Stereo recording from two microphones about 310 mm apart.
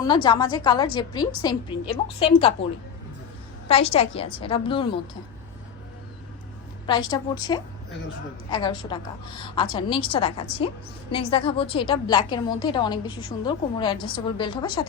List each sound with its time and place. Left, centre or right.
0.0 s a woman's voice: centre
3.7 s a woman's voice: centre
6.8 s a woman's voice: centre